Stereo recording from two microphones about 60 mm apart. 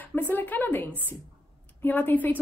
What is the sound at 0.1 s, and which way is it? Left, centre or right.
Speech, left.